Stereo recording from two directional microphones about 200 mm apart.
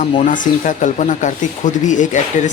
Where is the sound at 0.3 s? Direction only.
40° left (ahead or behind).